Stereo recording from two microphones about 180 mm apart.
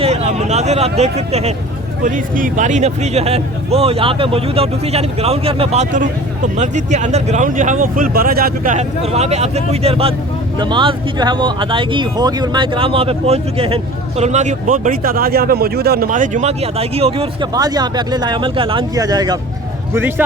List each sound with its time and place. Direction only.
0.0 s speech: 35° right (ahead or behind)
2.0 s speech: 45° right (ahead or behind)
16.0 s speech: 45° right (ahead or behind)
17.5 s a man's voice: 20° right (ahead or behind)